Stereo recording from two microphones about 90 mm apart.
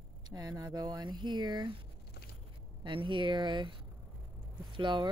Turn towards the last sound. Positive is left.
turn(degrees=-60)  # may be behind; listen again after turning